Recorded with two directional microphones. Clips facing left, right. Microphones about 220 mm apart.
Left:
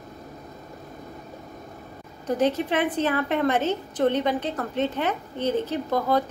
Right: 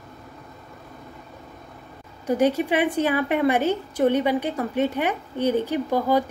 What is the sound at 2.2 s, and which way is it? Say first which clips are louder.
A woman's voice: right 3 dB; 10° right (ahead or behind).